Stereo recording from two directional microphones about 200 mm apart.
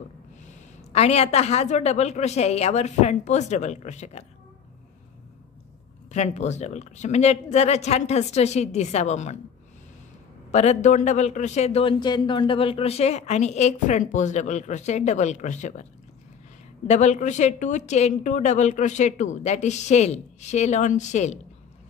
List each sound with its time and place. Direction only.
0.9 s a man's voice: 30° left (ahead or behind)
6.1 s a man's voice: 35° left (ahead or behind)
10.5 s a man's voice: 35° left (ahead or behind)
16.8 s a man's voice: 35° left (ahead or behind)